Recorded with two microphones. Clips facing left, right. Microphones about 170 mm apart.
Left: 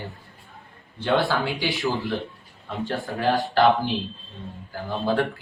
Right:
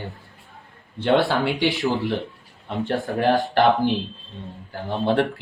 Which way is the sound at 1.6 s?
20° right (ahead or behind).